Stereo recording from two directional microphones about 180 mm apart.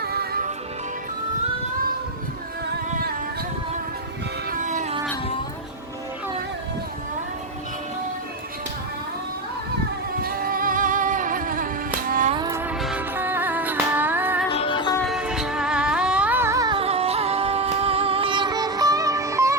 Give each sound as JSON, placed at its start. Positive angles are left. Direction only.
{"t": 0.0, "sound": "music", "side_deg": -60}
{"t": 4.5, "sound": "a sound", "side_deg": -40}
{"t": 10.2, "sound": "music", "side_deg": -55}
{"t": 12.3, "sound": "music", "side_deg": -20}
{"t": 14.5, "sound": "music", "side_deg": 30}
{"t": 15.0, "sound": "music", "side_deg": -5}
{"t": 16.7, "sound": "music", "side_deg": -35}